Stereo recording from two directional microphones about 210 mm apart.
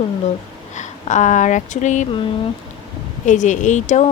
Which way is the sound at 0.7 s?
35° left (ahead or behind).